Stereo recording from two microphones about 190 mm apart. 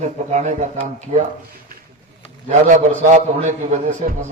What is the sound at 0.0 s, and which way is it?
Speech, 35° right (ahead or behind).